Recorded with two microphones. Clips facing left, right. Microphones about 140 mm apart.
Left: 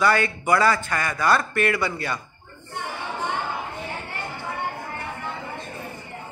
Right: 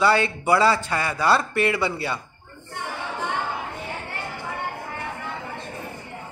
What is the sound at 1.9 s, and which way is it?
Speech, 10° right (ahead or behind).